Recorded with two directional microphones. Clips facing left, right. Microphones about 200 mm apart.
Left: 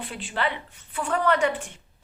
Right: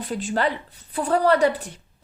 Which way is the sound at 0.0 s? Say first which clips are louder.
Right 5 dB; 40° right (ahead or behind).